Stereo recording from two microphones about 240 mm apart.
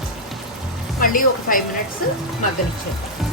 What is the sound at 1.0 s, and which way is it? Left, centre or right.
Speech, left.